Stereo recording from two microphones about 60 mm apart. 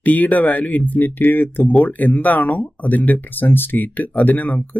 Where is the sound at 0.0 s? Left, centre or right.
Left.